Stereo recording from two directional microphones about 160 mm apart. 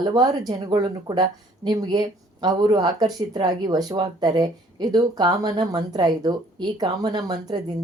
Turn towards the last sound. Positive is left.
turn(degrees=-25)  # may be behind; listen again after turning